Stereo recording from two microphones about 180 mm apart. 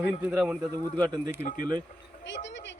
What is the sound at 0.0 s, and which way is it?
Speech, 10° right (ahead or behind).